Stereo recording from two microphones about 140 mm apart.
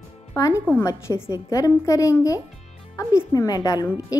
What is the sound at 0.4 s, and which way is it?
A woman's voice, 20° left (ahead or behind).